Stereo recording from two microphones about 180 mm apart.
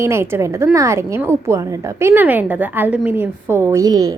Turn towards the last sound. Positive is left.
turn(degrees=-20)  # may be behind; listen again after turning